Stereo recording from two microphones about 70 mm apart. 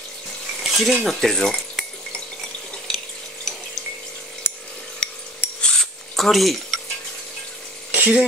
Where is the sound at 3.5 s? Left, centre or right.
Centre.